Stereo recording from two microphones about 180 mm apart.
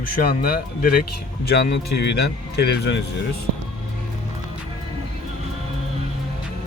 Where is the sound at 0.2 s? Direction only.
55° left (ahead or behind).